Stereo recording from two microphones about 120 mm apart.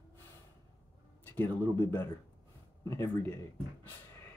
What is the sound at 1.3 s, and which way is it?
Speech, 20° left (ahead or behind).